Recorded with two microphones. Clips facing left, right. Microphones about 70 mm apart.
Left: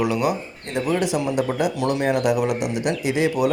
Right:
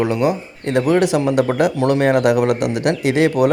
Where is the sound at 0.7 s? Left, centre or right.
Right.